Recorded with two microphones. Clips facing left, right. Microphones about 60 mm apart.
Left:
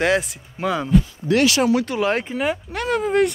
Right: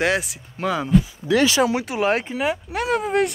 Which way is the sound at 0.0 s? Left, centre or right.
Centre.